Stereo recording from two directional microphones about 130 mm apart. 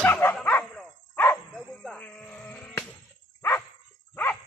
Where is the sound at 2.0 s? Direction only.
10° left (ahead or behind).